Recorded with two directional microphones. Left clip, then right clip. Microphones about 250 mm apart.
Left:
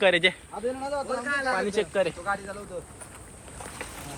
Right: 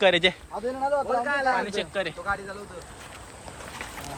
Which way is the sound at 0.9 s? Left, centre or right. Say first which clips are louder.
Right 5 dB; right.